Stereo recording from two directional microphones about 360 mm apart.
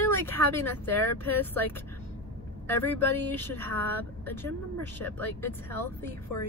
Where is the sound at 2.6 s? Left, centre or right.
Centre.